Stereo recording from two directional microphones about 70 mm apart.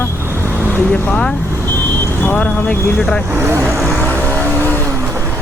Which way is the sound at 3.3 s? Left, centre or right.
Right.